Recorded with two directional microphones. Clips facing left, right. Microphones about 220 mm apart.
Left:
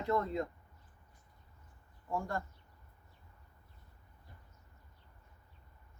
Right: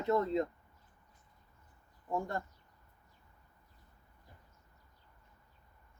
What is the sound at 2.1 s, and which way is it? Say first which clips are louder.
Speech: right 1 dB; 20° right (ahead or behind).